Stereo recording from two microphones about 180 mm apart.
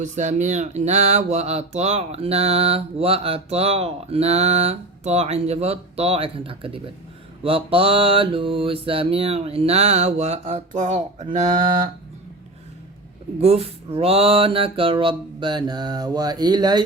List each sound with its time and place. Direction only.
0.0 s speech: 40° right (ahead or behind)
13.4 s mantra: 35° right (ahead or behind)